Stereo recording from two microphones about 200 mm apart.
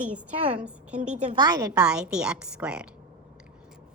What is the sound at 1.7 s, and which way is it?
A woman's voice, 5° right (ahead or behind).